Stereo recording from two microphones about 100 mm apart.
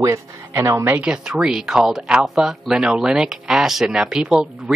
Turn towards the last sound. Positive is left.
turn(degrees=-5)  # may be behind; listen again after turning